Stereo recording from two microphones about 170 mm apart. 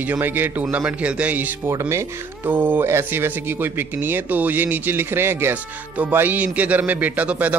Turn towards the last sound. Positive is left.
turn(degrees=-10)  # may be behind; listen again after turning